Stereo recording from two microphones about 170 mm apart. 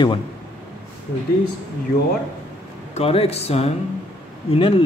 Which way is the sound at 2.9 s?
35° left (ahead or behind).